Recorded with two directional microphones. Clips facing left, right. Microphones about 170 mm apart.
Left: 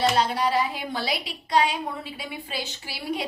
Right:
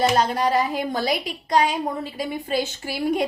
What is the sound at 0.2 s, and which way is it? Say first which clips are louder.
A woman's voice: right 3 dB; 45° right (ahead or behind).